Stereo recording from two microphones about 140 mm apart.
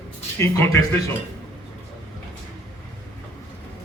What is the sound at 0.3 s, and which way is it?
Speech, 20° left (ahead or behind).